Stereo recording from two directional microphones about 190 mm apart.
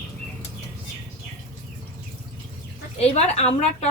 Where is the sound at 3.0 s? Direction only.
35° left (ahead or behind).